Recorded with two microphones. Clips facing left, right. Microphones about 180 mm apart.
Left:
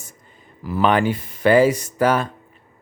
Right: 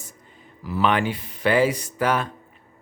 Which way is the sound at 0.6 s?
45° left (ahead or behind).